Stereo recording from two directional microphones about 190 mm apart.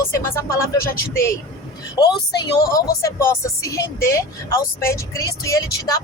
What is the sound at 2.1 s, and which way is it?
Speech, 20° left (ahead or behind).